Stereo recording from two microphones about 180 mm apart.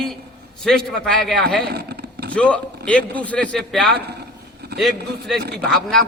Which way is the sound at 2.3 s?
5° left (ahead or behind).